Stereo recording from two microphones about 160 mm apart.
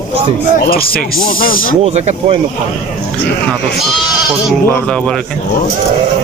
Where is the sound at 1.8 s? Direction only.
40° right (ahead or behind).